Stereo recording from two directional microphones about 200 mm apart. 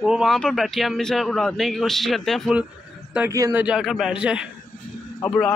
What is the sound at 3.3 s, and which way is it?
Speech, 15° right (ahead or behind).